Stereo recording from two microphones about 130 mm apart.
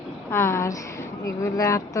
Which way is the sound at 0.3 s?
20° left (ahead or behind).